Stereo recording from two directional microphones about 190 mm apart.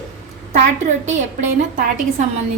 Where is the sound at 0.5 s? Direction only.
40° right (ahead or behind).